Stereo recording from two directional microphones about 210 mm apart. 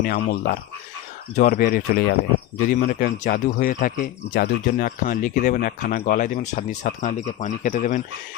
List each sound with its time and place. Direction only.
0.0 s speech: 45° left (ahead or behind)